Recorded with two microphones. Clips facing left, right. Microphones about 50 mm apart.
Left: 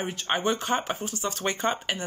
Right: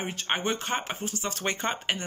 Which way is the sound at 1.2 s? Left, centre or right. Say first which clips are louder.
Left 3 dB; right.